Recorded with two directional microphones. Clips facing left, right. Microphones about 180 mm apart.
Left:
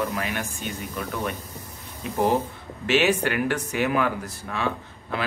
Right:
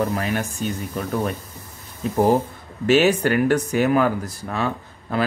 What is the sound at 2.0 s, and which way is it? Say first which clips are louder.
Speech: right 5 dB; 40° right (ahead or behind).